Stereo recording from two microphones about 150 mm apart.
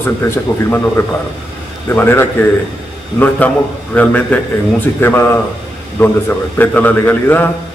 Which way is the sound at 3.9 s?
10° left (ahead or behind).